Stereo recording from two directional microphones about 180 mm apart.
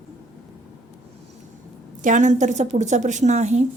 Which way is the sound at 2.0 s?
45° right (ahead or behind).